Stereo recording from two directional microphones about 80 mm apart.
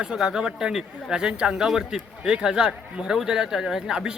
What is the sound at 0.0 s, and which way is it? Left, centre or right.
A man's voice, centre.